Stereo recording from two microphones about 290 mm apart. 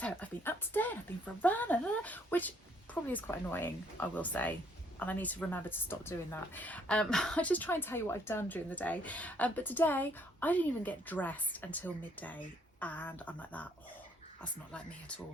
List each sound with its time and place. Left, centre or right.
0.0 s a woman's voice: centre